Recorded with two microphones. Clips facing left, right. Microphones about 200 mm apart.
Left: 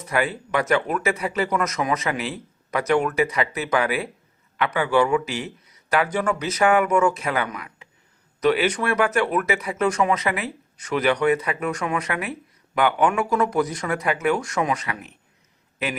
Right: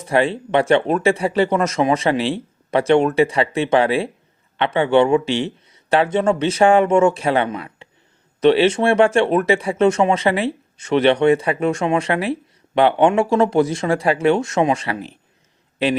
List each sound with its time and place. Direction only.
0.0 s speech: 30° right (ahead or behind)